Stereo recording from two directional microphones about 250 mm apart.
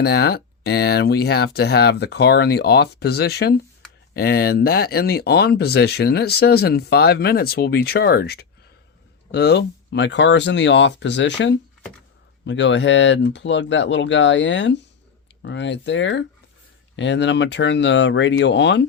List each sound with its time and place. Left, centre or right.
0.0 s speech: left